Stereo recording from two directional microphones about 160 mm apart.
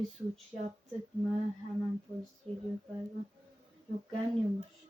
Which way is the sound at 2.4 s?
40° right (ahead or behind).